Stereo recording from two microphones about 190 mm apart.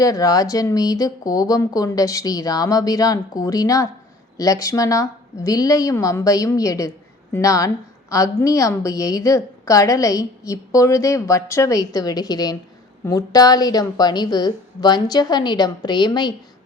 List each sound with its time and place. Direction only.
0.0 s a woman's voice: 20° left (ahead or behind)